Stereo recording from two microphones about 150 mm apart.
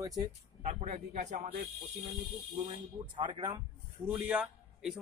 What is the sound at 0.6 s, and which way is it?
Speech, 40° right (ahead or behind).